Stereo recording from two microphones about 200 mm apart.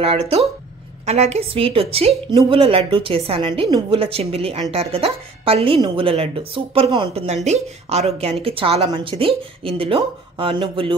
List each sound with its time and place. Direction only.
0.0 s a woman's voice: 30° right (ahead or behind)